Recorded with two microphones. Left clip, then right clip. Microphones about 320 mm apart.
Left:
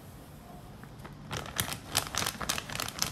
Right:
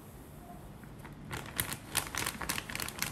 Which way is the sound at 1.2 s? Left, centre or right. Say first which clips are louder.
Left 4 dB; centre.